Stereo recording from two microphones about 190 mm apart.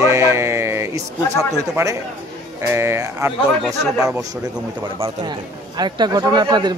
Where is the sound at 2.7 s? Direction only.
15° right (ahead or behind).